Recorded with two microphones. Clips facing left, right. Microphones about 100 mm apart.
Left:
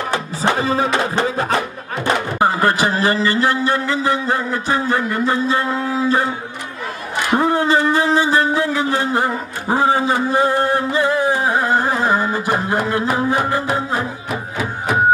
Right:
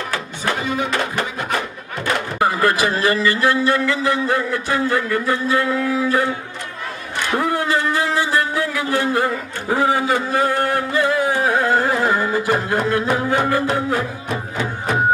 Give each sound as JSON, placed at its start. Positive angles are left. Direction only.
{"t": 0.1, "sound": "music", "side_deg": 30}
{"t": 0.9, "sound": "a man's voice", "side_deg": 30}
{"t": 7.2, "sound": "a man's voice", "side_deg": 25}
{"t": 12.8, "sound": "a sound", "side_deg": 15}
{"t": 13.7, "sound": "a man's voice", "side_deg": 20}
{"t": 14.3, "sound": "music", "side_deg": 5}